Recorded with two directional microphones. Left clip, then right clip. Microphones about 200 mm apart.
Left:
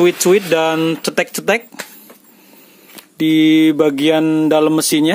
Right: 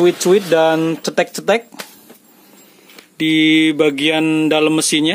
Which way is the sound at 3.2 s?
15° left (ahead or behind).